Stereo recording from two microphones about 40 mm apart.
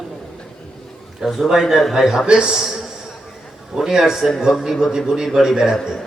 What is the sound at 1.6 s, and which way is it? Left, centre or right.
Speech, centre.